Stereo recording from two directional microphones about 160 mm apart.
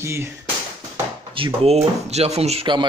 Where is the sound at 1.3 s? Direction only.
35° right (ahead or behind).